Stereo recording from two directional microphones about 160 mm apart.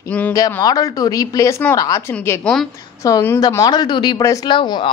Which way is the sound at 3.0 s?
20° left (ahead or behind).